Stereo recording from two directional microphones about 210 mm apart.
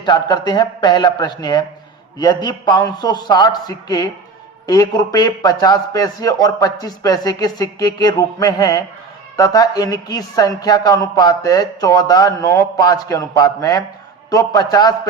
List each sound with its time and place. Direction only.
0.0 s a man's voice: 20° left (ahead or behind)